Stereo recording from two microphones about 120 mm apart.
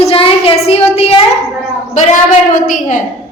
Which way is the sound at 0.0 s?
50° left (ahead or behind).